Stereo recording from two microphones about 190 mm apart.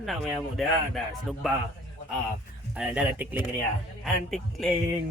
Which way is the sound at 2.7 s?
10° right (ahead or behind).